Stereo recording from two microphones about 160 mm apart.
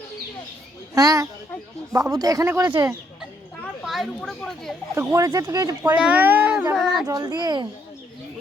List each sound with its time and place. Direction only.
0.9 s speech: 20° right (ahead or behind)
3.6 s speech: centre (ahead or behind)
4.9 s speech: 20° right (ahead or behind)
5.9 s speech: 5° right (ahead or behind)
6.9 s speech: 25° right (ahead or behind)